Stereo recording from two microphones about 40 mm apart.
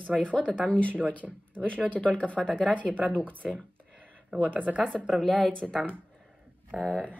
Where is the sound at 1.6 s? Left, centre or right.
Right.